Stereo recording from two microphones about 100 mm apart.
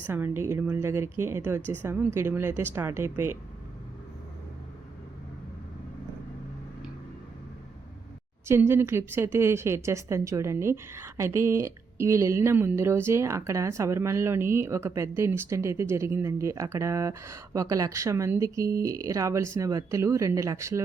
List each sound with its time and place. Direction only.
0.1 s speech: 25° right (ahead or behind)
8.4 s speech: 25° right (ahead or behind)